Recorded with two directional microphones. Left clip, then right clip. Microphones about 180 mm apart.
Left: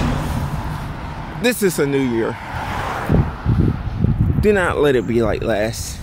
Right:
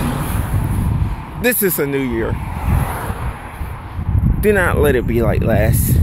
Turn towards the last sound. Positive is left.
turn(degrees=10)  # may be behind; listen again after turning